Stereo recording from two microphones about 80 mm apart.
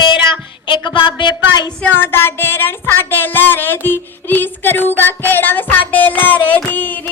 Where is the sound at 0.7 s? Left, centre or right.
Left.